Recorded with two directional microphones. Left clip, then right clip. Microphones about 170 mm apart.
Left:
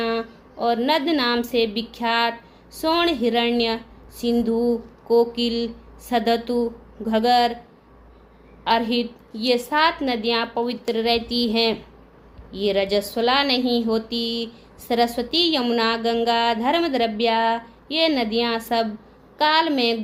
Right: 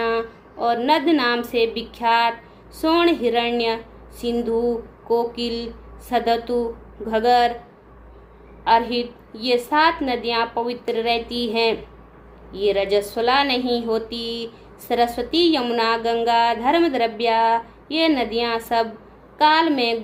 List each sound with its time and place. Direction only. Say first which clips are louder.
0.0 s a woman's voice: right 3 dB; 45° left (ahead or behind)
8.6 s speech: right 3 dB; 45° left (ahead or behind)